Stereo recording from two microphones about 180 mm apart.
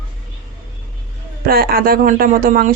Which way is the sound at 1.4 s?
55° right (ahead or behind).